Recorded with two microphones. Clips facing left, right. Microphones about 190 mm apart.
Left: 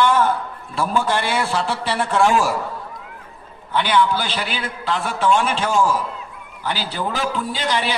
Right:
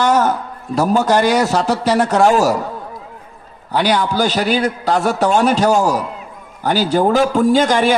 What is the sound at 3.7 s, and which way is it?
A man's voice, 40° right (ahead or behind).